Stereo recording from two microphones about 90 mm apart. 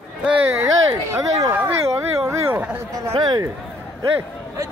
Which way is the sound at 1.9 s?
30° right (ahead or behind).